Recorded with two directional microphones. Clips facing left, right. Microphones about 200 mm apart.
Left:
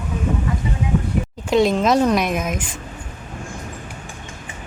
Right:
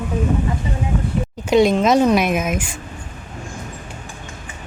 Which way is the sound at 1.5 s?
Centre (ahead or behind).